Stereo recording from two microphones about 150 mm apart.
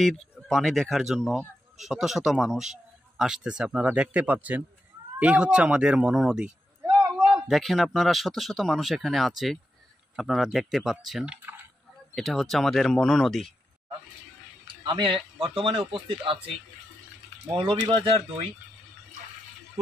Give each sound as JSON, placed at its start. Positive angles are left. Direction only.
{"t": 0.0, "sound": "speech", "side_deg": 0}
{"t": 7.0, "sound": "a sound", "side_deg": -5}
{"t": 7.4, "sound": "speech", "side_deg": 0}
{"t": 14.8, "sound": "speech", "side_deg": -30}
{"t": 17.6, "sound": "speech", "side_deg": -30}